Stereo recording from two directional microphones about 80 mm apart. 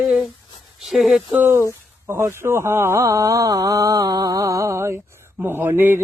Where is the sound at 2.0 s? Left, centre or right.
Right.